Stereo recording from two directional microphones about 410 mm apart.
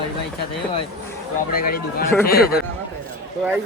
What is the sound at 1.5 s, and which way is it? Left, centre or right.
Speech, left.